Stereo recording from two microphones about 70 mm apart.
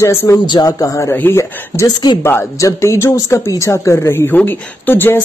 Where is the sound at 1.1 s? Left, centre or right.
Left.